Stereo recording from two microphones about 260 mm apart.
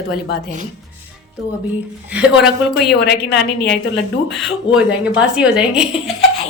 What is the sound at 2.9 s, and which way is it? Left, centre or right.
Speech, left.